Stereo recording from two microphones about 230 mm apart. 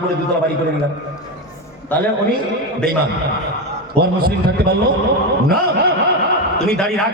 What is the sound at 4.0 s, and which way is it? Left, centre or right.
Speech, right.